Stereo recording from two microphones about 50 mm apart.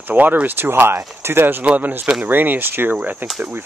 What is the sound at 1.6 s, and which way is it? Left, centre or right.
Speech, right.